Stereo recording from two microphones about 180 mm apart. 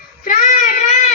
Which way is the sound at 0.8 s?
40° left (ahead or behind).